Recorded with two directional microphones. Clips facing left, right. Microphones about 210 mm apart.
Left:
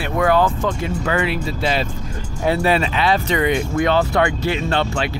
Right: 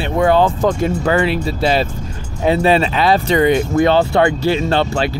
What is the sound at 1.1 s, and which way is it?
Speech, 30° right (ahead or behind).